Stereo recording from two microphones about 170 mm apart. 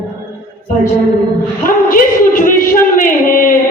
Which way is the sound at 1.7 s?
55° left (ahead or behind).